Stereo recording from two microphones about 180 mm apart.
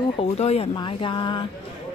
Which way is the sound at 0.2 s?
35° left (ahead or behind).